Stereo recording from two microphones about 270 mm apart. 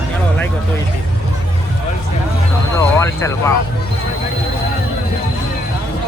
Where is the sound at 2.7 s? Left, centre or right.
Centre.